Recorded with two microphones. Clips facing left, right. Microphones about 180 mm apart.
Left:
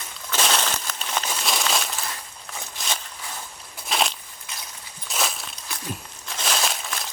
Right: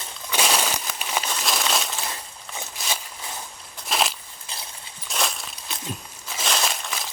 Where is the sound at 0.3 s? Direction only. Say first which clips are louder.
Right 1 dB; 10° right (ahead or behind).